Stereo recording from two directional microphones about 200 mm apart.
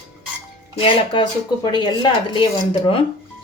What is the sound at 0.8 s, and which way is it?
A woman's voice, 25° left (ahead or behind).